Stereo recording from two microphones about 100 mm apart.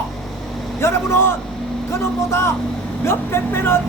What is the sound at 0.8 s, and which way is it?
A man's voice, 25° left (ahead or behind).